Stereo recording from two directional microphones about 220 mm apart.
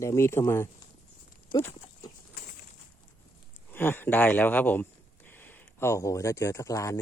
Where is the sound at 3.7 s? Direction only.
10° left (ahead or behind).